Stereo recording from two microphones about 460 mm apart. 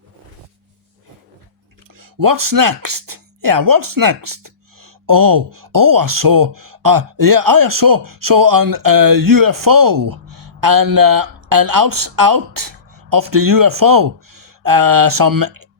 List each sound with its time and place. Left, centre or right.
2.0 s speech: right